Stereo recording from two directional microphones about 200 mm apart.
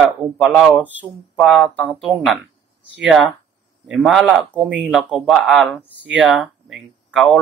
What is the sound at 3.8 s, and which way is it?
A man's voice, centre (ahead or behind).